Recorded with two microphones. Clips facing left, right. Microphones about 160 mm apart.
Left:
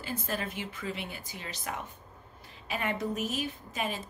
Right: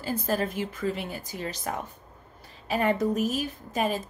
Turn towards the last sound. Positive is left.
turn(degrees=-40)  # may be behind; listen again after turning